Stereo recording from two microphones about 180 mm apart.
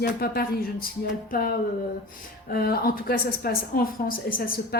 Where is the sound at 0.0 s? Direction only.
55° left (ahead or behind).